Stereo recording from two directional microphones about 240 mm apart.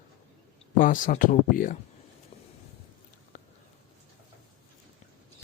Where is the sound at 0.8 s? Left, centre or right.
Left.